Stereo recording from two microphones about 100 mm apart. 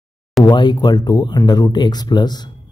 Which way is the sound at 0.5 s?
45° left (ahead or behind).